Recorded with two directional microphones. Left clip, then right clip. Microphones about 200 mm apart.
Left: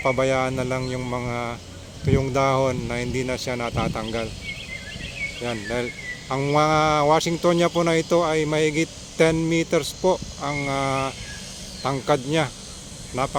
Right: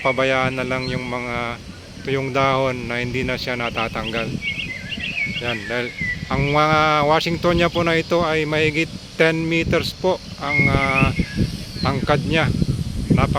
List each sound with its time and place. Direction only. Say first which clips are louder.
0.0 s speech: right 3 dB; centre (ahead or behind)
5.4 s speech: right 3 dB; centre (ahead or behind)